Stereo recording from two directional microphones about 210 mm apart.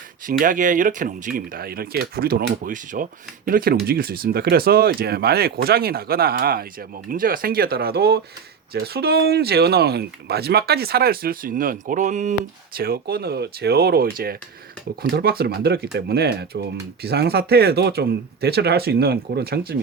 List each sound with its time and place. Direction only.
0.3 s speech: 40° right (ahead or behind)